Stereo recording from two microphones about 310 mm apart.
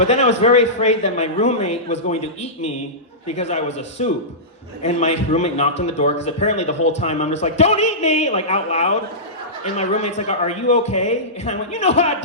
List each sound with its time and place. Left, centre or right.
0.0 s a man's voice: left